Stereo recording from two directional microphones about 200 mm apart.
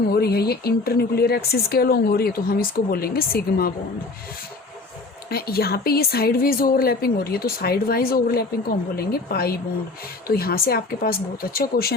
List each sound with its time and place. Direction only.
0.1 s a woman's voice: 50° left (ahead or behind)
5.3 s a woman's voice: 50° left (ahead or behind)